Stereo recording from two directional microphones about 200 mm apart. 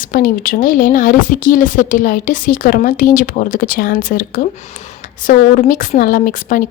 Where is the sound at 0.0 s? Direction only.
45° left (ahead or behind).